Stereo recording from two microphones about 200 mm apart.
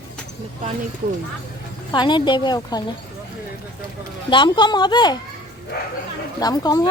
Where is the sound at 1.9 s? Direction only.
20° left (ahead or behind).